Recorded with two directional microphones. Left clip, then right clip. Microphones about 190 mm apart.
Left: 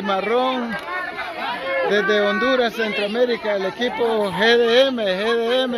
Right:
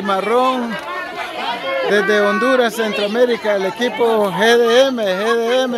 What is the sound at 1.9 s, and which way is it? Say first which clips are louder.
Speech: right 5 dB; 5° right (ahead or behind).